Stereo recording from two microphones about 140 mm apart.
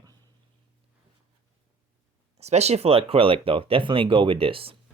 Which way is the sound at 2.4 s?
50° right (ahead or behind).